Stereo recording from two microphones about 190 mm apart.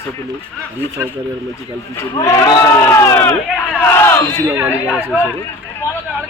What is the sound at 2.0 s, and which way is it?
A man's voice, 15° left (ahead or behind).